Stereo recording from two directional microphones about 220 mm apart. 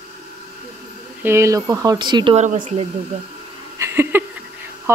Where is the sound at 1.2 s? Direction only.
10° right (ahead or behind); by 2.9 s 30° right (ahead or behind).